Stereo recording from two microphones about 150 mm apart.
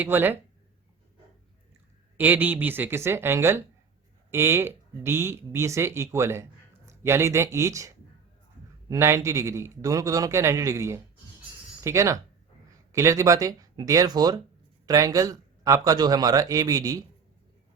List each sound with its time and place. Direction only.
0.0 s speech: 15° right (ahead or behind)
2.1 s a man's voice: 15° right (ahead or behind)